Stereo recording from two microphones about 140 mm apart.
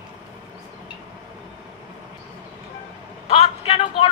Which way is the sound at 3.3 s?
45° left (ahead or behind).